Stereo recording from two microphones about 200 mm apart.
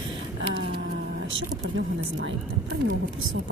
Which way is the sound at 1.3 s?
70° right (ahead or behind).